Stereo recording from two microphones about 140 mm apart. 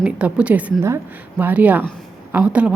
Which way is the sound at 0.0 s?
10° right (ahead or behind).